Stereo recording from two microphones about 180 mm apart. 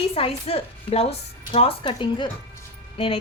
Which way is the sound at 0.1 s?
35° left (ahead or behind).